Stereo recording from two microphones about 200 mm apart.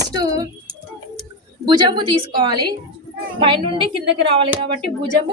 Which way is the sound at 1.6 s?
25° right (ahead or behind).